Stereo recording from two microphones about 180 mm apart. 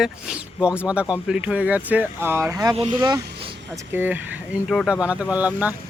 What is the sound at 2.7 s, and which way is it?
Speech, 40° right (ahead or behind).